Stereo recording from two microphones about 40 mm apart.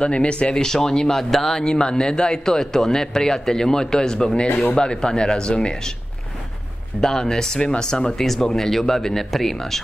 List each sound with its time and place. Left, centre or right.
0.0 s speech: left
0.8 s a man's voice: centre
1.6 s a man's voice: left
7.0 s a man's voice: centre